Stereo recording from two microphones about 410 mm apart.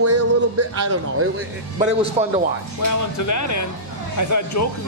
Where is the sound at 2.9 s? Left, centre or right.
Left.